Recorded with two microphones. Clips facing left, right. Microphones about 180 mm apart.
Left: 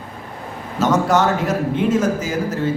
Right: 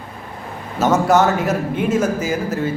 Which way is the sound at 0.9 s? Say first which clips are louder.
Right 2 dB; 5° right (ahead or behind).